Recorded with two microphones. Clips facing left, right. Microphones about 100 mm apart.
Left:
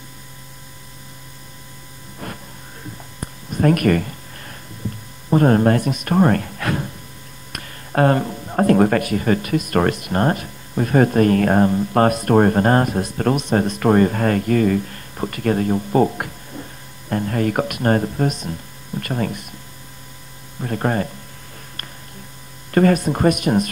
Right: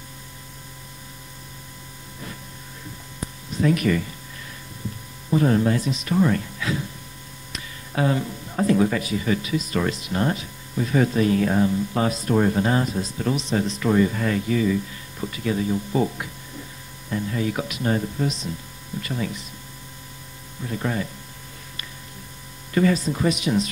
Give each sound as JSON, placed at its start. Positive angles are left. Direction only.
{"t": 3.5, "sound": "a sound", "side_deg": 55}
{"t": 5.3, "sound": "speech", "side_deg": 50}
{"t": 20.6, "sound": "speech", "side_deg": 55}
{"t": 22.7, "sound": "speech", "side_deg": 55}